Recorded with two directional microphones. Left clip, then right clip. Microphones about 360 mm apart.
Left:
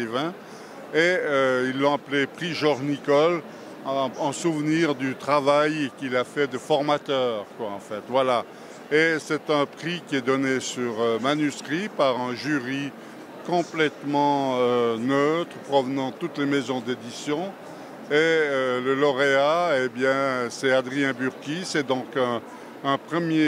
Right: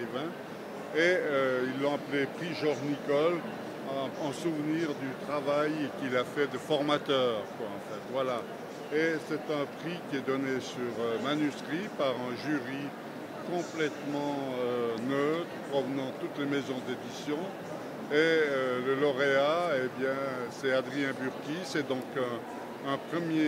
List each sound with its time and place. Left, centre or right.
0.0 s speech: left
6.0 s speech: left
8.1 s speech: left